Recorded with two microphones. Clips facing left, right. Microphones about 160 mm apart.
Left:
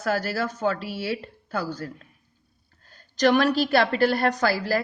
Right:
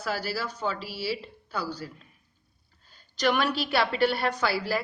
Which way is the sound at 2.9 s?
45° left (ahead or behind).